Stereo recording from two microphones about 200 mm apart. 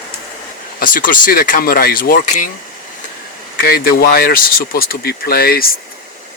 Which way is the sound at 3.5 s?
50° left (ahead or behind).